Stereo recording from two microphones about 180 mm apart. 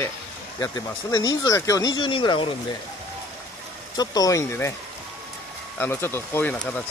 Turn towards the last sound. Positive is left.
turn(degrees=5)  # may be behind; listen again after turning